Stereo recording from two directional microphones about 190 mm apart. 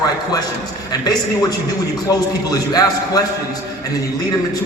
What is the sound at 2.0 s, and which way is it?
A man's voice, 20° left (ahead or behind).